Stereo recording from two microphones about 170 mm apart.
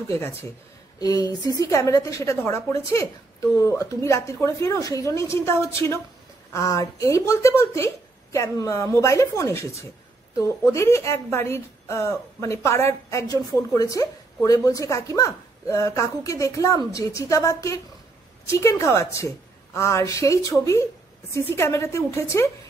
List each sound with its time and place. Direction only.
0.1 s a woman's voice: 15° left (ahead or behind)